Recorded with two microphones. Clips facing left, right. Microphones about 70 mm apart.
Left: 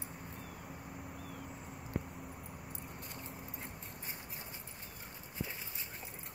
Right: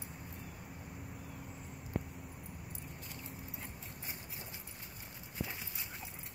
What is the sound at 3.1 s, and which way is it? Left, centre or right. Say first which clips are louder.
Vehicle: left 1 dB; left.